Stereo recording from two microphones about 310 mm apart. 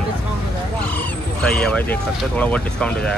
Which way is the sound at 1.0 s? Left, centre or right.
Centre.